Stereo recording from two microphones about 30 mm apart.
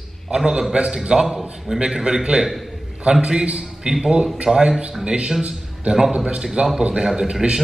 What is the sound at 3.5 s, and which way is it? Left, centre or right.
A man's voice, right.